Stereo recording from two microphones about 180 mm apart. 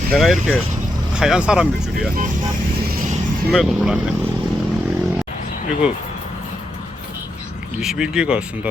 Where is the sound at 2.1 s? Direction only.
50° right (ahead or behind).